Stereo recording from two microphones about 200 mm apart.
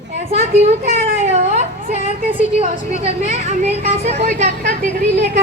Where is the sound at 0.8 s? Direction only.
35° right (ahead or behind).